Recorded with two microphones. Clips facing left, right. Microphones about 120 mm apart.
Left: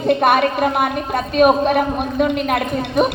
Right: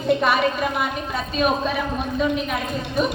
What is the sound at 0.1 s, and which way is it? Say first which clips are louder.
A woman's voice: left 4 dB; 60° left (ahead or behind).